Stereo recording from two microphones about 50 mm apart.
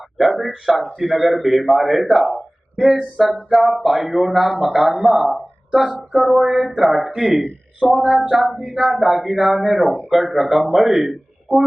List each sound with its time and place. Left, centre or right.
0.2 s a man's voice: centre